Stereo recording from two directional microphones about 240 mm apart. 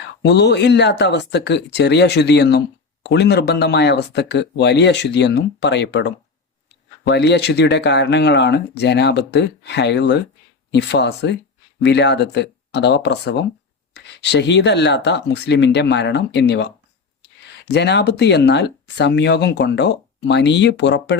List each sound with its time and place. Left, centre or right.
0.2 s speech: left